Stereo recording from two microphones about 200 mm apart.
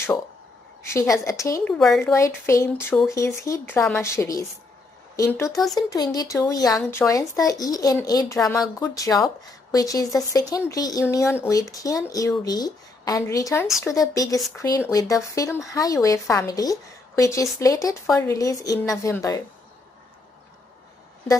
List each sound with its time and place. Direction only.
0.8 s speech: 15° left (ahead or behind)